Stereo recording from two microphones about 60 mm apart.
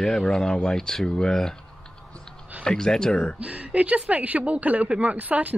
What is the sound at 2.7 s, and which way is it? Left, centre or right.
Speech, centre.